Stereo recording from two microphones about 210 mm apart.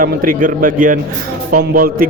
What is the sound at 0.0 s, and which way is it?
A man's voice, 40° right (ahead or behind).